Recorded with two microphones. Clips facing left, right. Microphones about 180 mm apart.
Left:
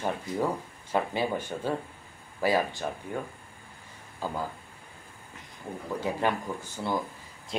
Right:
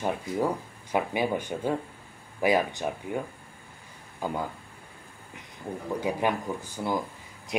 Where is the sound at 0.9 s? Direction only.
15° right (ahead or behind).